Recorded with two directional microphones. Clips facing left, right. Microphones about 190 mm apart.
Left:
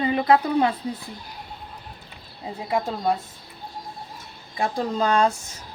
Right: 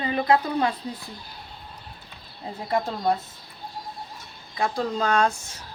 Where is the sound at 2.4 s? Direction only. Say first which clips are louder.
Left 1 dB; 5° left (ahead or behind).